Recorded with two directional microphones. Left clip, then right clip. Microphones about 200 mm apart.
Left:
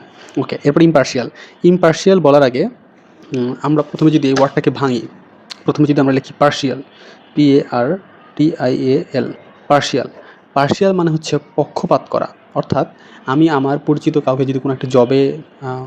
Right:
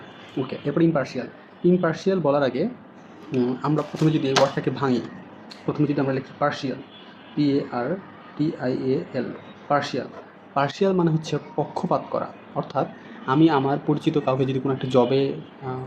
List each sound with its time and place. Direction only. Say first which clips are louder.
0.3 s speech: left 11 dB; 50° left (ahead or behind)